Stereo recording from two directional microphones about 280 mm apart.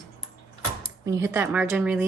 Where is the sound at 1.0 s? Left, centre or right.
Centre.